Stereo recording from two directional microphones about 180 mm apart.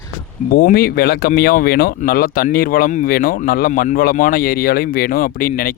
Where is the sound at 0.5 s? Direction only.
55° left (ahead or behind).